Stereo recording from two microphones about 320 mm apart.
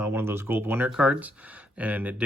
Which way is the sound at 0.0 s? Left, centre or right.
Centre.